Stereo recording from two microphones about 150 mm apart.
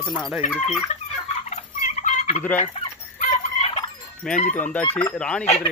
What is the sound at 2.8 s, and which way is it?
Fowl, 45° left (ahead or behind).